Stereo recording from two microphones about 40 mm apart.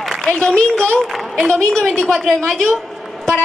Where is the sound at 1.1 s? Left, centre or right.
Centre.